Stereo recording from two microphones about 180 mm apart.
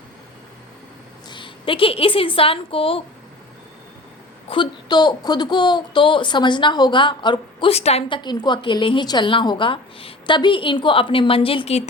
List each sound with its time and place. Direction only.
1.3 s a woman's voice: 25° left (ahead or behind)
4.4 s speech: 25° left (ahead or behind)